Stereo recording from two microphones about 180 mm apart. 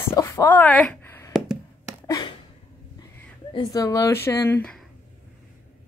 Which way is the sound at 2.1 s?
20° left (ahead or behind).